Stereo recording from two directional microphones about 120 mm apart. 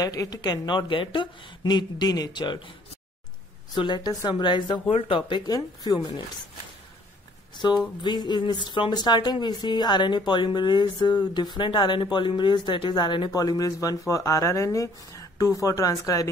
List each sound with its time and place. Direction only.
0.0 s speech: 30° left (ahead or behind)
3.7 s speech: 40° left (ahead or behind)
5.5 s speech: 35° left (ahead or behind)
8.0 s speech: 40° left (ahead or behind)